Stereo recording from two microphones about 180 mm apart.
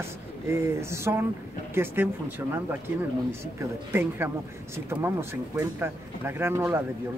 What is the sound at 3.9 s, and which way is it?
Speech, 10° right (ahead or behind).